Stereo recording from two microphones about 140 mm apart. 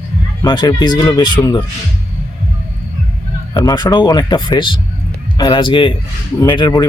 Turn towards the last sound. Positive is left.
turn(degrees=30)  # may be behind; listen again after turning